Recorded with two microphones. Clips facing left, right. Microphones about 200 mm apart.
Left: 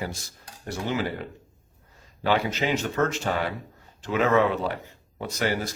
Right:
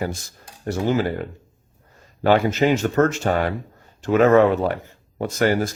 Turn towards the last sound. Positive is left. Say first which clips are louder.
# right 7 dB
turn(degrees=-50)  # may be behind; listen again after turning